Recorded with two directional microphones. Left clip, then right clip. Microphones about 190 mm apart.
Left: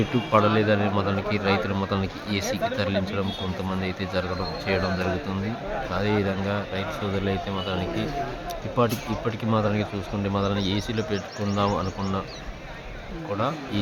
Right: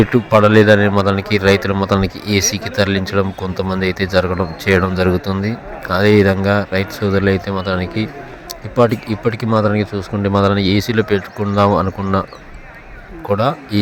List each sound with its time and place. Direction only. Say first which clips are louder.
0.0 s speech: right 9 dB; 40° right (ahead or behind)
13.3 s speech: right 11 dB; 45° right (ahead or behind)